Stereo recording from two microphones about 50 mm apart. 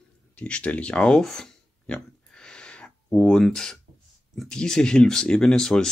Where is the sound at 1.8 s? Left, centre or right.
Centre.